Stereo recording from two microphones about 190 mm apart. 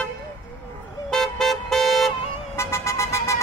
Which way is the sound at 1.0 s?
Centre (ahead or behind).